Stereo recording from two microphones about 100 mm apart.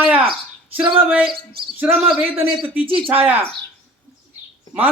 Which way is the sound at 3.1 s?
15° right (ahead or behind).